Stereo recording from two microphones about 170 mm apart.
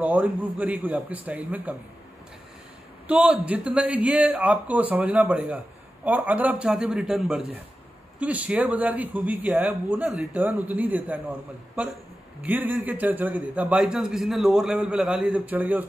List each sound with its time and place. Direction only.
0.0 s speech: 10° right (ahead or behind)
3.1 s a man's voice: 5° right (ahead or behind)